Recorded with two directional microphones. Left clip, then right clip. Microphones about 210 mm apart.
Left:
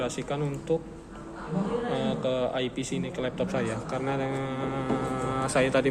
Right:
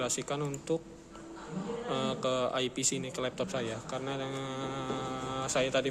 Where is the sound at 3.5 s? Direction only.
15° right (ahead or behind).